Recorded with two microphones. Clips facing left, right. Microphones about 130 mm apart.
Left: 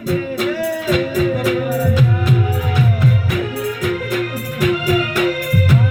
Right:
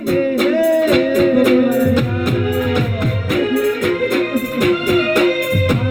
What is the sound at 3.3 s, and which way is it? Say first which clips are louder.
Music: right 6 dB; 55° right (ahead or behind).